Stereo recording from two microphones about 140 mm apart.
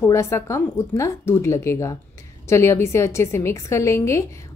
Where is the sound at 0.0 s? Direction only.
20° left (ahead or behind).